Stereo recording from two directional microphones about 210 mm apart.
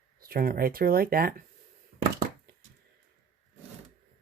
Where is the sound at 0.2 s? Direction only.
45° right (ahead or behind).